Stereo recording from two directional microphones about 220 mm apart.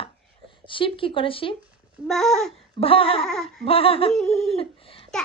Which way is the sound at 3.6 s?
25° left (ahead or behind).